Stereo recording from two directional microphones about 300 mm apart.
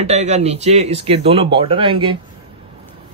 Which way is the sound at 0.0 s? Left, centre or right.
Right.